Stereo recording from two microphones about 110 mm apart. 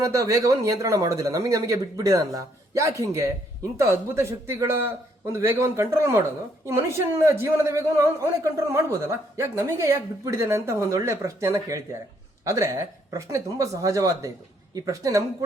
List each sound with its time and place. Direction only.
0.0 s a man's voice: 30° right (ahead or behind)